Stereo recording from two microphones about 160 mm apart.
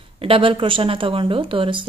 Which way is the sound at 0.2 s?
35° right (ahead or behind).